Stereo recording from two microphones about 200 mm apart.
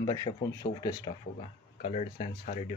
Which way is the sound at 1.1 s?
35° left (ahead or behind).